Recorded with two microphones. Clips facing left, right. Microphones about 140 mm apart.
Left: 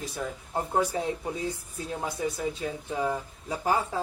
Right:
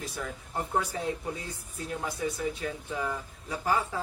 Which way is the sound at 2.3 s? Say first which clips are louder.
Left 1 dB; 25° left (ahead or behind).